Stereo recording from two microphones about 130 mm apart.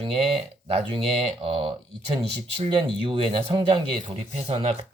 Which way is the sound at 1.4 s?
45° right (ahead or behind).